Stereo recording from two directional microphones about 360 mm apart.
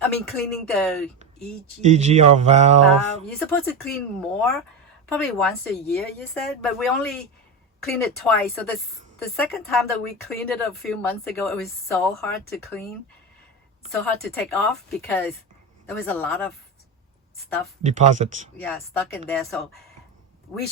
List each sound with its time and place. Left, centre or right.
0.0 s a woman's voice: centre
1.2 s speech: centre
2.9 s a woman's voice: centre
14.0 s a woman's voice: centre
17.8 s speech: centre
18.5 s a woman's voice: centre